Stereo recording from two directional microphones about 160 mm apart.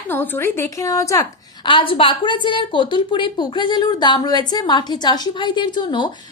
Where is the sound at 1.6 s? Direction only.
30° left (ahead or behind).